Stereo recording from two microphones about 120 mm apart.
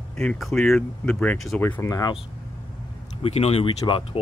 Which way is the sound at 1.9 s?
30° left (ahead or behind).